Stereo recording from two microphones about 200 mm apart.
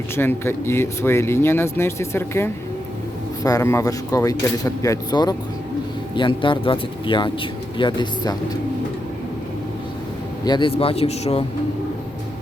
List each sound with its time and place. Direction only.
0.2 s speech: 10° left (ahead or behind)
10.4 s speech: 25° left (ahead or behind)